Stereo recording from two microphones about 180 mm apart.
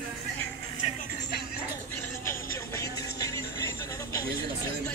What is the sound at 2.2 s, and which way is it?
Vehicle, 15° left (ahead or behind).